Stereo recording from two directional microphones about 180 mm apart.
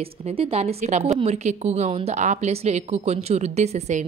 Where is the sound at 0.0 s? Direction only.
30° right (ahead or behind).